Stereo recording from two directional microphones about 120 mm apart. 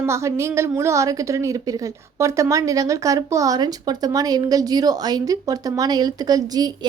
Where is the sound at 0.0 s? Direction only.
25° right (ahead or behind).